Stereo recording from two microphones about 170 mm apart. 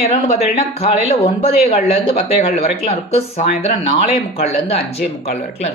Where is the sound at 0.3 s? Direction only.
35° left (ahead or behind).